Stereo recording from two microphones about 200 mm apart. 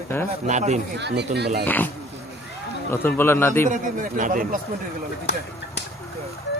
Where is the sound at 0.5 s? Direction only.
35° right (ahead or behind).